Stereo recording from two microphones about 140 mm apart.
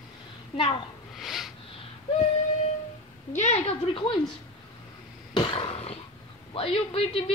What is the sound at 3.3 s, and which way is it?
Speech, 55° left (ahead or behind).